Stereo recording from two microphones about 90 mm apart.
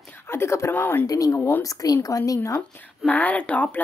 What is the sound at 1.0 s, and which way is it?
A woman's voice, 40° left (ahead or behind).